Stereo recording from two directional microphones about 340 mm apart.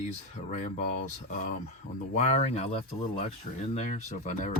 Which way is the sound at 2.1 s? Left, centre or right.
Centre.